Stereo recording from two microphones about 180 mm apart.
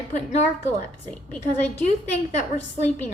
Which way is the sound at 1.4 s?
40° left (ahead or behind).